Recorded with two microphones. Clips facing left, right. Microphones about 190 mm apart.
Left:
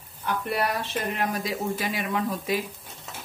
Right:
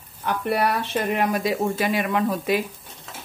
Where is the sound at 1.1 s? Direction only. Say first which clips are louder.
Right 8 dB; 65° right (ahead or behind).